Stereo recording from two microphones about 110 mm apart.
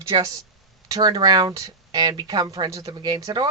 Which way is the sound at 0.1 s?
40° right (ahead or behind).